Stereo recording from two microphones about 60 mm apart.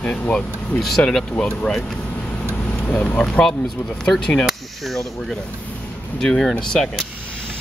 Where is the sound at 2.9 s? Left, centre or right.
Centre.